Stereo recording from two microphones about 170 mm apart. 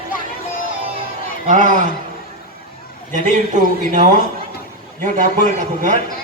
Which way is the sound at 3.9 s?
45° right (ahead or behind).